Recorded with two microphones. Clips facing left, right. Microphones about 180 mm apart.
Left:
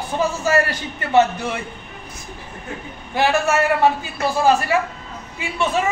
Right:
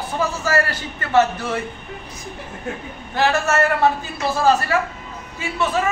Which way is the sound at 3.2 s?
10° left (ahead or behind).